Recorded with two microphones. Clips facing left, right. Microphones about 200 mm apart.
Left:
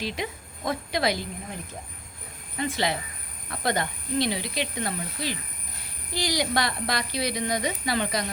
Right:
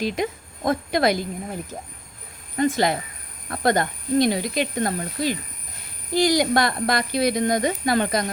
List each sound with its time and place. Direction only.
0.0 s speech: 45° right (ahead or behind)
2.6 s speech: 45° right (ahead or behind)